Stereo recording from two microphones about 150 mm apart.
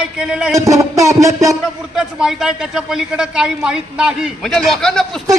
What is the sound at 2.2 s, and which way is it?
A woman's voice, 5° right (ahead or behind).